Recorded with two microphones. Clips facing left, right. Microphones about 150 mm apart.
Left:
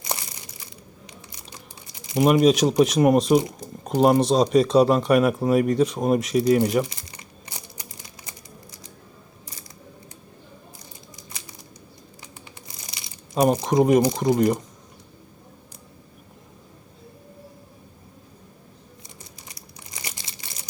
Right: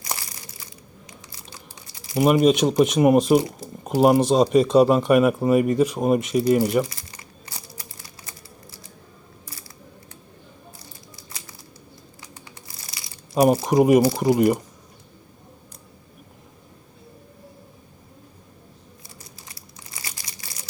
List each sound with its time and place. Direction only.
2.1 s speech: 5° right (ahead or behind)
6.8 s crumpling: 20° left (ahead or behind)
12.6 s a sound: 20° left (ahead or behind)
13.3 s speech: 5° right (ahead or behind)
19.5 s crumpling: 20° left (ahead or behind)